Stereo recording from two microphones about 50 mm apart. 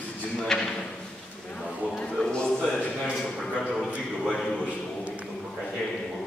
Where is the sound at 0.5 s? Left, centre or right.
Centre.